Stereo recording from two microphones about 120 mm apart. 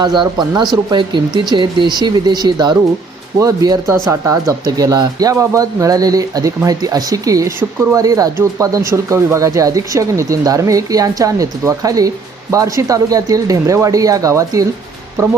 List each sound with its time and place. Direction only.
0.0 s speech: 35° right (ahead or behind)